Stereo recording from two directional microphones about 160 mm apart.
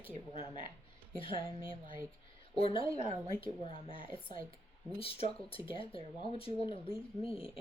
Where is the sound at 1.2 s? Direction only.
35° left (ahead or behind).